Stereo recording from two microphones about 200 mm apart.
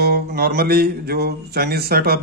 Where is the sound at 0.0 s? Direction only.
50° right (ahead or behind).